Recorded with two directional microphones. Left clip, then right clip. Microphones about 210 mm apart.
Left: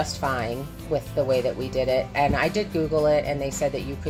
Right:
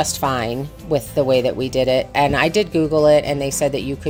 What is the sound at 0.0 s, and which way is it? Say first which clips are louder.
Speech: right 6 dB; 45° right (ahead or behind).